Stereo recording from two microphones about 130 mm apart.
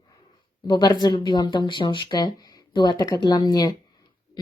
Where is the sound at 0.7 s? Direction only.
35° left (ahead or behind).